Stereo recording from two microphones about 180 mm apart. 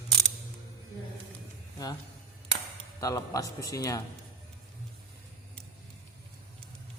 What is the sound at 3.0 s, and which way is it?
Speech, 20° left (ahead or behind).